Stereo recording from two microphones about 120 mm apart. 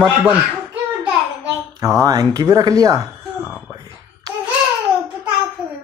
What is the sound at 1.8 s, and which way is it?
Speech, 30° right (ahead or behind).